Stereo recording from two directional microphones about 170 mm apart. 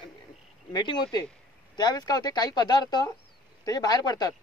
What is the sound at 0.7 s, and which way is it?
Speech, 25° left (ahead or behind).